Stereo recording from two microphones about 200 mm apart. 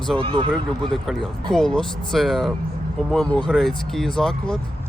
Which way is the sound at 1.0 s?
Centre (ahead or behind).